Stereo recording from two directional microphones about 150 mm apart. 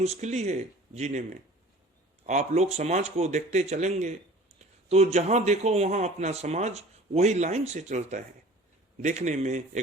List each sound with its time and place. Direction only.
0.0 s a man's voice: 45° right (ahead or behind)